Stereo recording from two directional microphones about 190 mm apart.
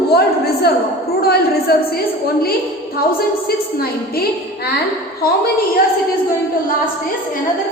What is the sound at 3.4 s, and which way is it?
Speech, 55° left (ahead or behind).